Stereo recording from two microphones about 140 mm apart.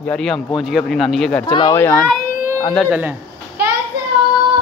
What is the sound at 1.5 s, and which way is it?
Speech, 30° left (ahead or behind).